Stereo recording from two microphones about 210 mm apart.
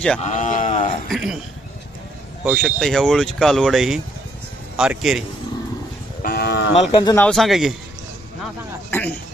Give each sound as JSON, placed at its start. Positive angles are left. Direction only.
{"t": 0.2, "sound": "speech", "side_deg": 35}
{"t": 1.1, "sound": "speech", "side_deg": 0}
{"t": 2.4, "sound": "speech", "side_deg": 0}
{"t": 6.2, "sound": "cattle", "side_deg": 50}
{"t": 6.9, "sound": "speech", "side_deg": 20}
{"t": 7.3, "sound": "speech", "side_deg": 0}
{"t": 8.9, "sound": "a sound", "side_deg": 10}